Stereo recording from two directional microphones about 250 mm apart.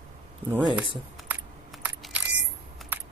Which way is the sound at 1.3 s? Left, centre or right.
Centre.